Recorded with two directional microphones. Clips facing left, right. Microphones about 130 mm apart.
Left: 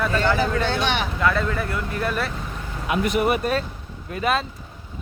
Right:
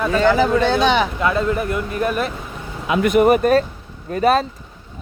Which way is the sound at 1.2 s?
20° right (ahead or behind).